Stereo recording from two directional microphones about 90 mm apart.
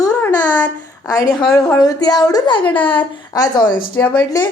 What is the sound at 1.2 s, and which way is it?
A woman's voice, 45° left (ahead or behind).